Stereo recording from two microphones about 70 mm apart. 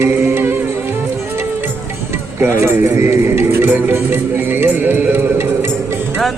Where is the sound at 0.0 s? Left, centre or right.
Right.